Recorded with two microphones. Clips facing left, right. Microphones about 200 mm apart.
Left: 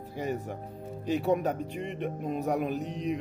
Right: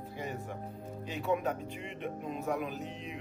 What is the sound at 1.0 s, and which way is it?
A man's voice, 40° left (ahead or behind).